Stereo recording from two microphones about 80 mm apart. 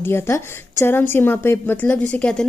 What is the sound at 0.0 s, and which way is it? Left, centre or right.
A woman's voice, left.